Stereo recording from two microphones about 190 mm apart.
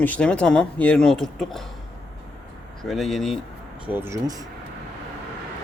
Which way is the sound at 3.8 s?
10° right (ahead or behind).